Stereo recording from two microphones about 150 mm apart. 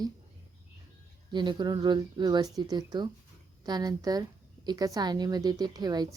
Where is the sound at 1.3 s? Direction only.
30° right (ahead or behind).